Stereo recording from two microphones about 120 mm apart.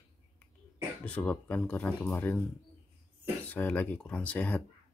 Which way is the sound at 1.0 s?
10° left (ahead or behind).